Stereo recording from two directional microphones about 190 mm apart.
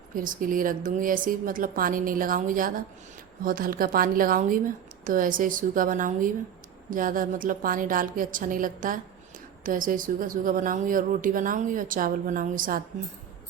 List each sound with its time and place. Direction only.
0.1 s speech: 45° right (ahead or behind)